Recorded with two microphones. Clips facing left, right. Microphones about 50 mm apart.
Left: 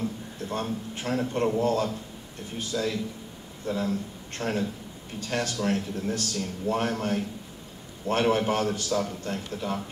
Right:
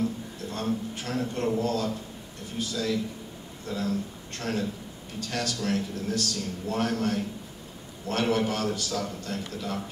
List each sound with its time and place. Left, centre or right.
0.9 s a man's voice: left